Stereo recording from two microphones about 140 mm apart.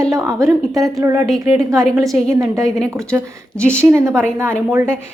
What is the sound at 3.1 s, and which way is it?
Speech, centre (ahead or behind).